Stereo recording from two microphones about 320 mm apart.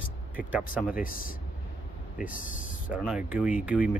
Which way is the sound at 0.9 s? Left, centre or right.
Left.